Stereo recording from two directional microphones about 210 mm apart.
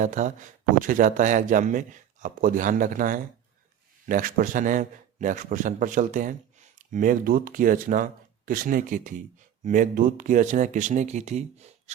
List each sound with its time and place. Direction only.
0.0 s speech: 35° right (ahead or behind)